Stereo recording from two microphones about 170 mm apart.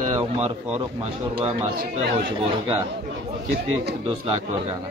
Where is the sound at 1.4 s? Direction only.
35° right (ahead or behind).